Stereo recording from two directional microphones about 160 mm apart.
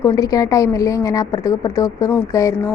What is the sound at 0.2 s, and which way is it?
A woman's voice, 20° left (ahead or behind).